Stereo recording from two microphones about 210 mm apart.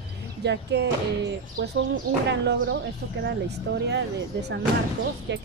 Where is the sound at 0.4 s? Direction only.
55° right (ahead or behind).